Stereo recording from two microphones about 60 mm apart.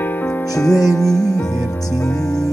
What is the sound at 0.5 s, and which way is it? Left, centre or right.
Music, left.